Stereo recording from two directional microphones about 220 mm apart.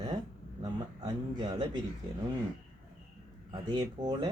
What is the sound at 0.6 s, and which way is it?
Speech, 20° right (ahead or behind).